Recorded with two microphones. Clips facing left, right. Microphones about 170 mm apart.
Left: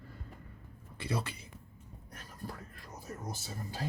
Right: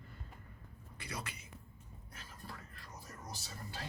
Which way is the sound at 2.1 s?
45° left (ahead or behind).